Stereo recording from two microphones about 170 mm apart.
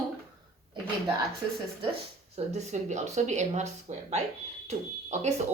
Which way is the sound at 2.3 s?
40° right (ahead or behind).